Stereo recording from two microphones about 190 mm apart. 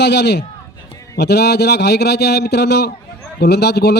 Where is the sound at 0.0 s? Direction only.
65° left (ahead or behind).